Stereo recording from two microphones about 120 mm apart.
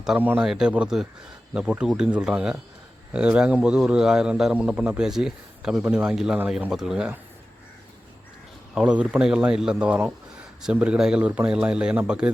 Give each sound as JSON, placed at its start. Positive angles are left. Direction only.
{"t": 0.2, "sound": "a man's voice", "side_deg": -15}
{"t": 0.4, "sound": "a man's voice", "side_deg": -5}
{"t": 8.7, "sound": "a man's voice", "side_deg": -10}